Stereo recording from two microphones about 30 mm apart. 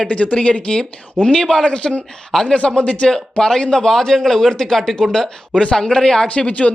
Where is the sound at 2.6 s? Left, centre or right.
Left.